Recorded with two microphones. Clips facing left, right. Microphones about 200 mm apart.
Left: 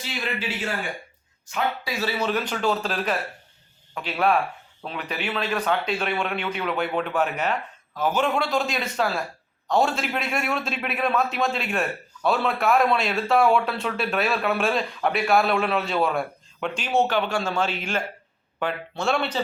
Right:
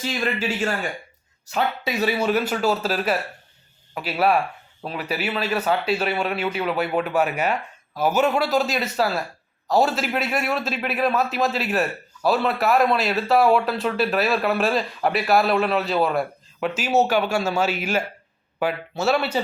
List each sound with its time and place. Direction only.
0.0 s speech: 45° right (ahead or behind)
1.5 s speech: 35° right (ahead or behind)
1.9 s a man's voice: 20° right (ahead or behind)